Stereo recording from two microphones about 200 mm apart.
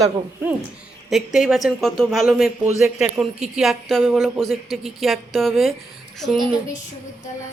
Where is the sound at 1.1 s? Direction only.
Centre (ahead or behind).